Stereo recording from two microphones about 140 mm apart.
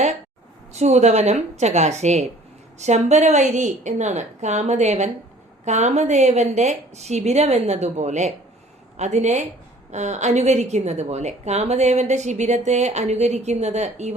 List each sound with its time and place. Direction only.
0.7 s a woman's voice: 55° right (ahead or behind)